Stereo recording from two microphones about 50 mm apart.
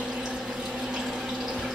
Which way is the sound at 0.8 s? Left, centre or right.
Centre.